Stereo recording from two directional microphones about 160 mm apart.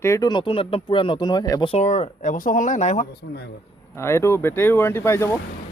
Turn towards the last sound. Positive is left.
turn(degrees=15)  # may be behind; listen again after turning